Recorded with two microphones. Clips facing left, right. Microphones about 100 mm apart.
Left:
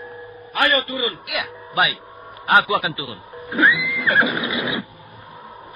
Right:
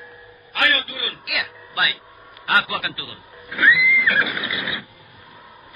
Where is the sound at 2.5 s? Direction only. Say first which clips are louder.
Left 4 dB; 25° left (ahead or behind).